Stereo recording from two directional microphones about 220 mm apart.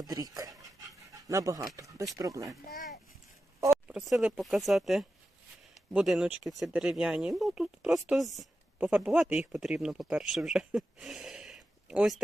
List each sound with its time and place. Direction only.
0.0 s speech: 15° right (ahead or behind)
3.7 s speech: 5° right (ahead or behind)